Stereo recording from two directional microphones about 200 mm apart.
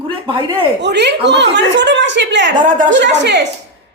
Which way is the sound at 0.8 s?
55° right (ahead or behind).